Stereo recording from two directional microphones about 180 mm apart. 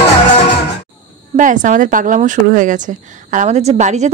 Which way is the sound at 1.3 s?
45° right (ahead or behind).